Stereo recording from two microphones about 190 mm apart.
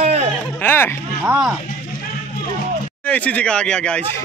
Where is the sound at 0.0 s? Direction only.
35° right (ahead or behind).